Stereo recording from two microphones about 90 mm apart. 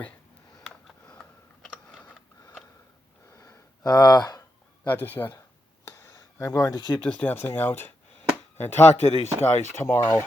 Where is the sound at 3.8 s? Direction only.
45° left (ahead or behind).